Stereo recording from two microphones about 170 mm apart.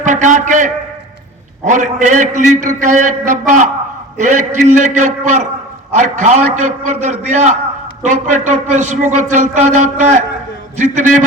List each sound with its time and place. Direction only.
0.0 s a man's voice: 45° right (ahead or behind)